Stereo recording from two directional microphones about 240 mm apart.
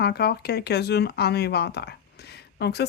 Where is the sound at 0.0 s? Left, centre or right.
Left.